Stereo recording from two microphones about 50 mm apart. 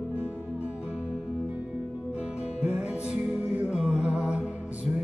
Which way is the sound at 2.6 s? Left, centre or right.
Right.